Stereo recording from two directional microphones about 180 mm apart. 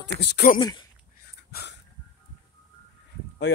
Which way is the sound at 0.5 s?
25° left (ahead or behind).